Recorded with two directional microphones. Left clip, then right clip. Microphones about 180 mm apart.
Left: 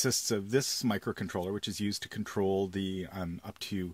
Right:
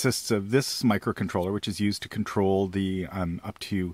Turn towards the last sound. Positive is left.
turn(degrees=-30)  # may be behind; listen again after turning